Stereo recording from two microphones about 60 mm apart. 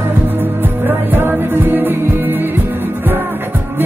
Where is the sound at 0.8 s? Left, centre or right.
Right.